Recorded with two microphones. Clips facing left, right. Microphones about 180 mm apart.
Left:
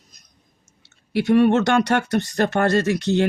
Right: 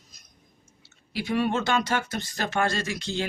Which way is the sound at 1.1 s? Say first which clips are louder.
Left 10 dB; 65° left (ahead or behind).